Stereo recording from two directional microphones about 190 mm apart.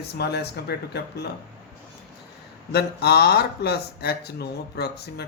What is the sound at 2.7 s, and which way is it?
Speech, 60° left (ahead or behind).